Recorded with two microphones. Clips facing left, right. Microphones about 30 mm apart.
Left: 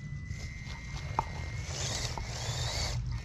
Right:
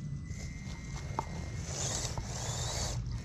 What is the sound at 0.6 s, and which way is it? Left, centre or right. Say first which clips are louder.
Horse: left 1 dB; left.